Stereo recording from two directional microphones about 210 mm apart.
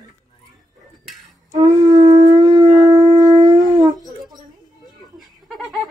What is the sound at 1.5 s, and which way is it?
Shofar, 25° right (ahead or behind).